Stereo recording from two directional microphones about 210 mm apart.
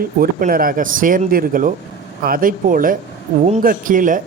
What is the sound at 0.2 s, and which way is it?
Speech, 45° right (ahead or behind).